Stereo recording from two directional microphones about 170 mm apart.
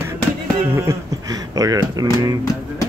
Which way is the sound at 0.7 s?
15° right (ahead or behind).